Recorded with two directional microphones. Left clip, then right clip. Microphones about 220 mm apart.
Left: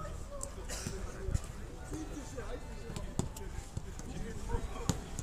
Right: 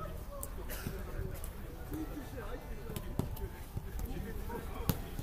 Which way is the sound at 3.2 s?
45° left (ahead or behind).